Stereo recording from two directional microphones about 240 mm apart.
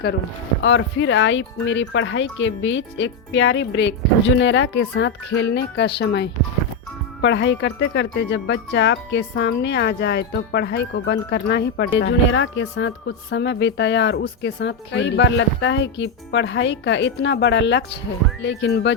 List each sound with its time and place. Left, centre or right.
0.6 s speech: left